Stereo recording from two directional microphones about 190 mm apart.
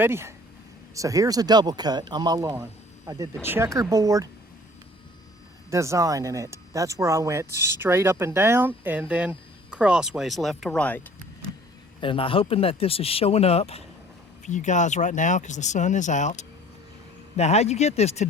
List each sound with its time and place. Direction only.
0.0 s speech: 15° right (ahead or behind)
5.7 s speech: 15° right (ahead or behind); by 11.0 s 5° left (ahead or behind)
11.9 s speech: 25° left (ahead or behind)